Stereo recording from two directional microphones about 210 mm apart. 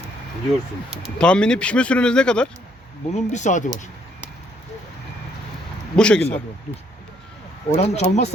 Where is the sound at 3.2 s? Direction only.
35° left (ahead or behind).